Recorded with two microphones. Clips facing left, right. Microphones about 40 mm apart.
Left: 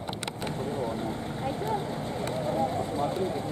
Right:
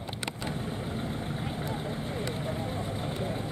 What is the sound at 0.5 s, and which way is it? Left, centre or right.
Vehicle, right.